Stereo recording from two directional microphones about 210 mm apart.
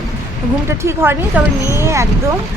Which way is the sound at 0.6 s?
10° right (ahead or behind).